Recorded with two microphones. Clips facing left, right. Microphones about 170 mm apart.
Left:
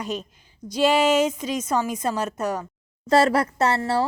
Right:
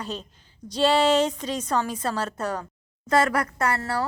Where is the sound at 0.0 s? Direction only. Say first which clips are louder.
Left 4 dB; 15° left (ahead or behind).